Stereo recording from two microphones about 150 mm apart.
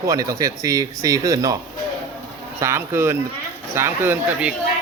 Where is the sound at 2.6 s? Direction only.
20° right (ahead or behind).